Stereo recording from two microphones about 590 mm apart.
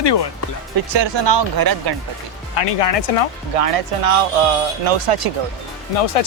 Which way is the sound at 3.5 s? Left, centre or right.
Right.